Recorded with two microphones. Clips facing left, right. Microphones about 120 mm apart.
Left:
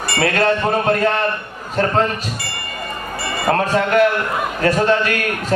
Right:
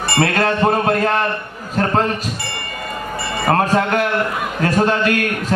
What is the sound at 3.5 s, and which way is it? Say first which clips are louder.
Speech: even; 40° right (ahead or behind).